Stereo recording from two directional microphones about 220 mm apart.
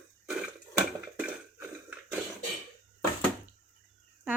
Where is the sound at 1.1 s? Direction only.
5° right (ahead or behind).